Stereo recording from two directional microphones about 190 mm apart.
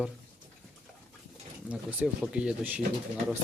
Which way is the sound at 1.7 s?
5° right (ahead or behind).